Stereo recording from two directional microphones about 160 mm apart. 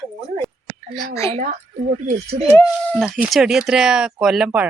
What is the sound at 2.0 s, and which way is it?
Speech, 45° right (ahead or behind).